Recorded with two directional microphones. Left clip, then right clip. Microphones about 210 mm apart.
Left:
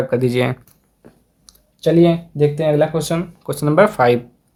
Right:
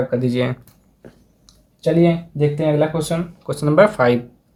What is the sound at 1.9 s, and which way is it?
Speech, 45° left (ahead or behind).